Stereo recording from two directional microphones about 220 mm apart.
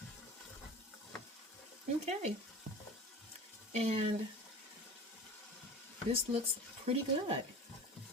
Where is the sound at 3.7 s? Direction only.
30° right (ahead or behind).